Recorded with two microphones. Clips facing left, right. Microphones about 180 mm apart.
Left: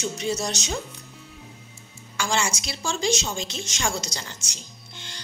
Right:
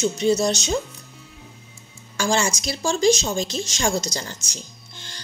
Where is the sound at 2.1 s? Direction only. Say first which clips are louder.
Right 4 dB; 40° right (ahead or behind).